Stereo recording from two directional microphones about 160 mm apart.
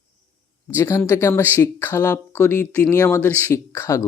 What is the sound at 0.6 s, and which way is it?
Speech, 15° left (ahead or behind).